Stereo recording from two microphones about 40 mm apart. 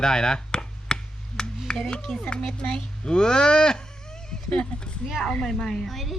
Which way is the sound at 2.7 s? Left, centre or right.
Left.